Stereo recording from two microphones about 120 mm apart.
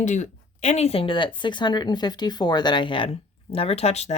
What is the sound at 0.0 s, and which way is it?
Speech, 85° left.